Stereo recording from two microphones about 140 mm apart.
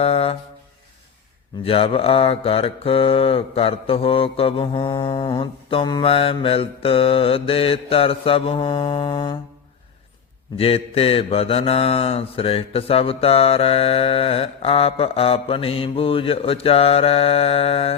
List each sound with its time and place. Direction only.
0.0 s a sound: 45° left (ahead or behind)
1.6 s mantra: 40° left (ahead or behind)
10.6 s mantra: 45° left (ahead or behind)